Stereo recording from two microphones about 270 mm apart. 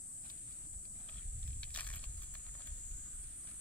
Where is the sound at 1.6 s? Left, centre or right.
Centre.